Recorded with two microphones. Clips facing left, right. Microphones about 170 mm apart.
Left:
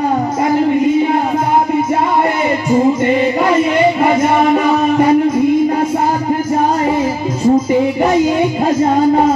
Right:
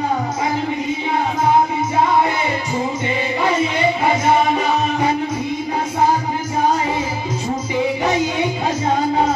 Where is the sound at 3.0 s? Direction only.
55° left (ahead or behind).